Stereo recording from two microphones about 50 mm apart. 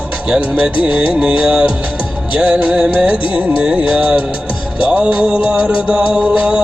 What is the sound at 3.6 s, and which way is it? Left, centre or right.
Music, centre.